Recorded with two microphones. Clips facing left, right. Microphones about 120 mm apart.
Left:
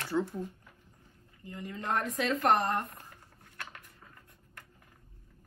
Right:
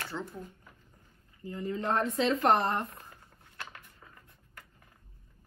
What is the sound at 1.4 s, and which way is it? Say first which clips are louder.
Speech: right 6 dB; 35° right (ahead or behind).